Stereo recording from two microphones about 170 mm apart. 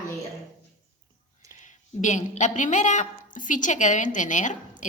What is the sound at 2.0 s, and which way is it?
A woman's voice, 45° left (ahead or behind).